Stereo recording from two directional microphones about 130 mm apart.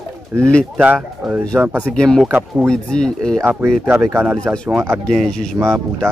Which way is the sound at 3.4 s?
15° right (ahead or behind).